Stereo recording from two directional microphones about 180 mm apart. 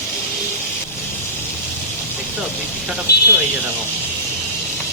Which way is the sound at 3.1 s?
65° left (ahead or behind).